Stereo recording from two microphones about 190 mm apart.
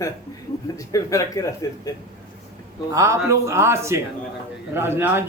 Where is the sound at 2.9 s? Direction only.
15° right (ahead or behind).